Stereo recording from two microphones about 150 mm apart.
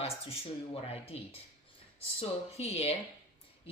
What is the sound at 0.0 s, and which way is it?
A woman's voice, 40° left (ahead or behind).